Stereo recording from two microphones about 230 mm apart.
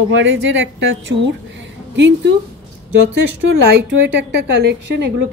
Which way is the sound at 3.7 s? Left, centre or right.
Right.